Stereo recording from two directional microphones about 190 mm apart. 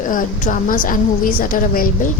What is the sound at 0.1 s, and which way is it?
Speech, 45° left (ahead or behind).